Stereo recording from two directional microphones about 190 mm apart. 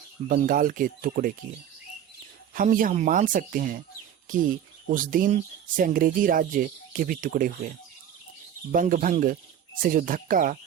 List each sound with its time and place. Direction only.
0.3 s speech: 45° right (ahead or behind)
2.6 s speech: 45° right (ahead or behind)
8.7 s speech: 45° right (ahead or behind)